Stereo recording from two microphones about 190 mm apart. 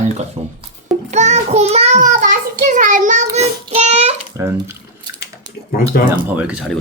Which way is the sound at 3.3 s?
35° right (ahead or behind).